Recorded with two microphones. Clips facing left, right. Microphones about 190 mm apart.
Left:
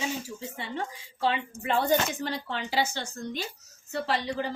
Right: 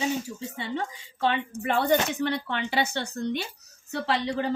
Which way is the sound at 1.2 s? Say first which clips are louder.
Right 2 dB; 65° right (ahead or behind).